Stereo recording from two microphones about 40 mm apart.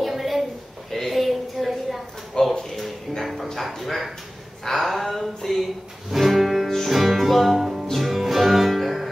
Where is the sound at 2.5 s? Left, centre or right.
Centre.